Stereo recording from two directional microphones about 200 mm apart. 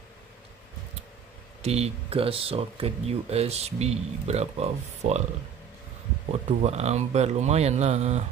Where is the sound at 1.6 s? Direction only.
30° right (ahead or behind).